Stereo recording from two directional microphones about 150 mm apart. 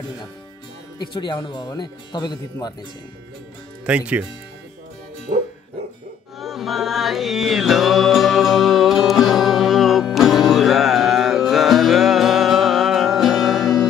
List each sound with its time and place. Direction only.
0.9 s speech: 30° left (ahead or behind)
3.8 s speech: 10° right (ahead or behind)
5.3 s music: 45° right (ahead or behind)
6.4 s music: centre (ahead or behind)